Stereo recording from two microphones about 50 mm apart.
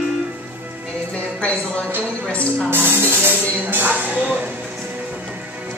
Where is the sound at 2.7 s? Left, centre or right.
Right.